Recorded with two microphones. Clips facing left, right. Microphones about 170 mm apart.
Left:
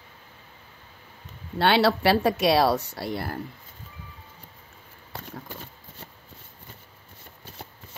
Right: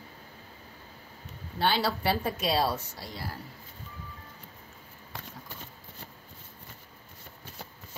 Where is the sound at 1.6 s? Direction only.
75° left (ahead or behind).